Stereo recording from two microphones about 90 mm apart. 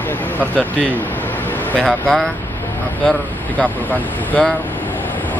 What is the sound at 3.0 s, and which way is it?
Speech, 15° left (ahead or behind).